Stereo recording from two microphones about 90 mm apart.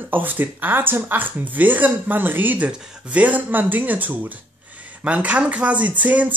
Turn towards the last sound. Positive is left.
turn(degrees=-15)  # may be behind; listen again after turning